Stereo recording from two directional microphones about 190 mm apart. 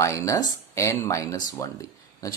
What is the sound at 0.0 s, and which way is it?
Speech, 15° left (ahead or behind).